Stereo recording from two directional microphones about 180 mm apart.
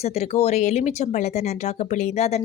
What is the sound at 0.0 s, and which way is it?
Speech, 35° left (ahead or behind).